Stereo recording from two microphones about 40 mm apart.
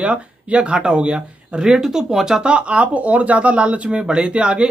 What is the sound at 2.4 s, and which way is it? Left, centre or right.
Speech, right.